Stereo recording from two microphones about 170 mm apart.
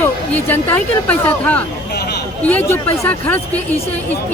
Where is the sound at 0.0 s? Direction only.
10° left (ahead or behind).